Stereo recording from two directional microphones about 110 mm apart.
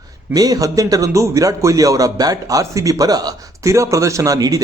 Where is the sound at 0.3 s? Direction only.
35° right (ahead or behind).